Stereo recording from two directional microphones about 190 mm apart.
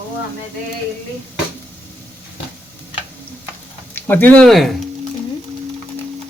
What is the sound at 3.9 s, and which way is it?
Speech, 10° left (ahead or behind).